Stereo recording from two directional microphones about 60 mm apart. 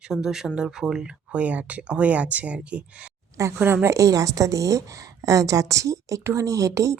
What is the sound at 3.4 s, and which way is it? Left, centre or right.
A woman's voice, right.